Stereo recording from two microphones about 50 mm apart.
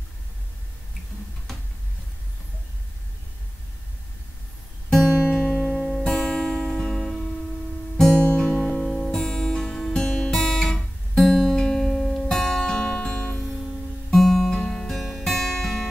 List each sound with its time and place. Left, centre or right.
4.9 s music: centre
7.0 s music: centre
8.1 s music: left
10.3 s guitar: centre; by 13.3 s left
14.1 s music: centre